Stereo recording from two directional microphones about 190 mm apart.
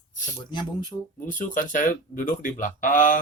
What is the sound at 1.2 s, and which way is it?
Speech, 45° left (ahead or behind).